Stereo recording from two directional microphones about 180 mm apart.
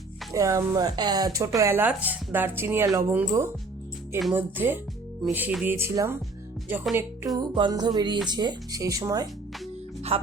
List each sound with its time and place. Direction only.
0.3 s speech: 15° right (ahead or behind)
7.3 s speech: 25° right (ahead or behind)
10.1 s speech: 30° right (ahead or behind)